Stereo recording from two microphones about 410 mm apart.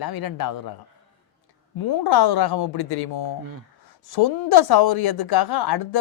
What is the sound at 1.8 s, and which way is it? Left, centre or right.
A woman's voice, left.